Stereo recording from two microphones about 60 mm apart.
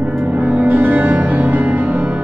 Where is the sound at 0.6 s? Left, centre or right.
Right.